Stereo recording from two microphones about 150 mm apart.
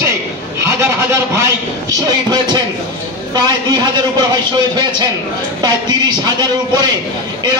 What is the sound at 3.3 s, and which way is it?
Speech, 30° right (ahead or behind).